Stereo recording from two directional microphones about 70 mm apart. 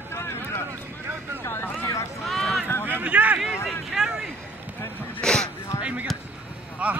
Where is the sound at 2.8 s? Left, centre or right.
Right.